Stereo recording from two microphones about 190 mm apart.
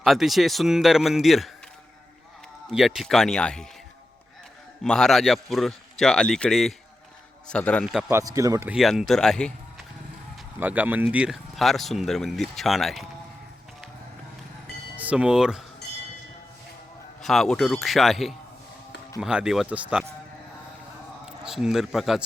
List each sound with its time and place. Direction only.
0.0 s speech: centre (ahead or behind)
2.6 s speech: centre (ahead or behind)
4.8 s speech: 5° left (ahead or behind)
8.0 s speech: 20° right (ahead or behind)
8.7 s speech: centre (ahead or behind)
10.6 s speech: 10° right (ahead or behind)
14.9 s speech: 5° right (ahead or behind)
17.2 s speech: centre (ahead or behind)
21.2 s a man's voice: 5° right (ahead or behind)